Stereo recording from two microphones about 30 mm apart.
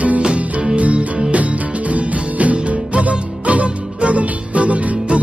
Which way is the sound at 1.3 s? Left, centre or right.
Right.